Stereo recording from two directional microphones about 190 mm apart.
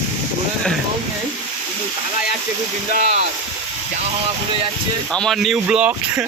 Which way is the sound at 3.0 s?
40° right (ahead or behind).